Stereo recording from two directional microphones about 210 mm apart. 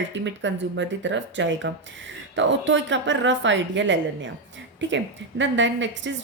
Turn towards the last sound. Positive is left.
turn(degrees=-60)  # may be behind; listen again after turning